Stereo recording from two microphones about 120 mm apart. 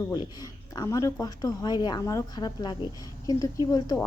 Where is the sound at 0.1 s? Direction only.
35° left (ahead or behind).